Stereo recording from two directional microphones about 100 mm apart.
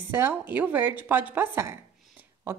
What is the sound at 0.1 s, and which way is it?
Speech, 20° right (ahead or behind).